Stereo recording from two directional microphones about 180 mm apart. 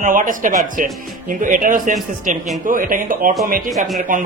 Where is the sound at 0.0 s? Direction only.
45° right (ahead or behind).